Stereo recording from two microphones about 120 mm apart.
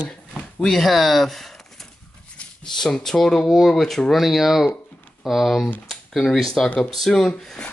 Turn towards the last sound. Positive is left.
turn(degrees=5)  # may be behind; listen again after turning